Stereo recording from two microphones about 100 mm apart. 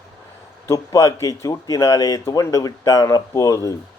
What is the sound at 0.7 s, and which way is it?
Speech, 30° left (ahead or behind).